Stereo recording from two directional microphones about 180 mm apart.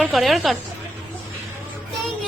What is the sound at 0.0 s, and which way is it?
Speech, centre (ahead or behind).